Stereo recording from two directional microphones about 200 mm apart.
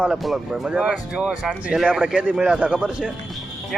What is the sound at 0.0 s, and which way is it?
Speech, centre (ahead or behind).